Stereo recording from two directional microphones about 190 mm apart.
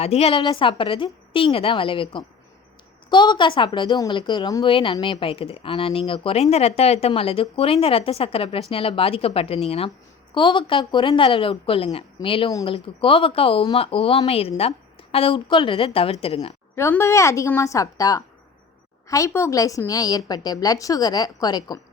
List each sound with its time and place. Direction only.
0.0 s a woman's voice: 30° left (ahead or behind)
16.7 s a woman's voice: 15° left (ahead or behind)